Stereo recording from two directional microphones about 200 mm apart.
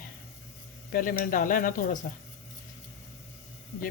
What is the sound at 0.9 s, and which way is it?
Speech, 45° left (ahead or behind).